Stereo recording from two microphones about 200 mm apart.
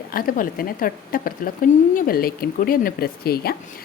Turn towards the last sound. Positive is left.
turn(degrees=50)  # may be behind; listen again after turning